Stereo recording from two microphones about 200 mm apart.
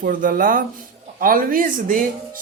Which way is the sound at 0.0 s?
45° right (ahead or behind).